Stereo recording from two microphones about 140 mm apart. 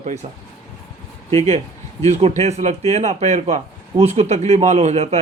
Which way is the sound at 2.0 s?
50° right (ahead or behind).